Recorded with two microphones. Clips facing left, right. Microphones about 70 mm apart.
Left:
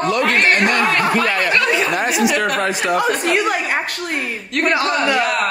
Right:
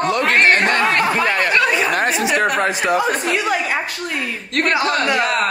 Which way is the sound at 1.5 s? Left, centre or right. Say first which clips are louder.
Even; centre.